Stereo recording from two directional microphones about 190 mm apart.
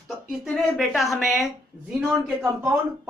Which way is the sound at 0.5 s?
Centre (ahead or behind).